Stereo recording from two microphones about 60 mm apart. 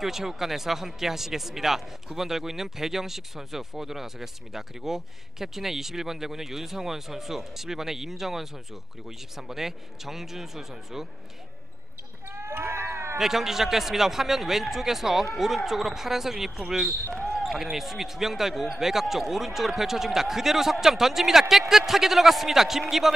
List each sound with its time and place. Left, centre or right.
0.0 s speech: centre
12.3 s a sound: right
13.2 s speech: centre